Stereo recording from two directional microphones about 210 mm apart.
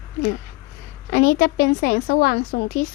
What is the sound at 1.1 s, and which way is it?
A woman's voice, 45° left (ahead or behind).